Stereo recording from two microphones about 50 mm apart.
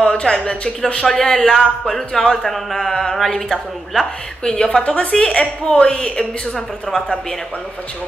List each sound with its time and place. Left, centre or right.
0.0 s a sound: centre
0.5 s a woman's voice: centre
1.0 s a woman's voice: centre
6.9 s speech: centre